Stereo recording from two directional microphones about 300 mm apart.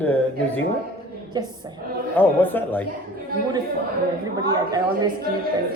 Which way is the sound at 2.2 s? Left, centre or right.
Centre.